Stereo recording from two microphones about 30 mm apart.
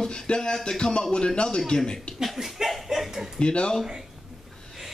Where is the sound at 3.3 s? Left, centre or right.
Left.